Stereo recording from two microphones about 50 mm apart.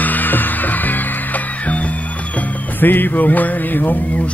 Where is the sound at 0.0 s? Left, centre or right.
Left.